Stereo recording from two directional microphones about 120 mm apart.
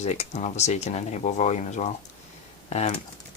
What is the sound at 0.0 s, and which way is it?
Speech, 70° left (ahead or behind).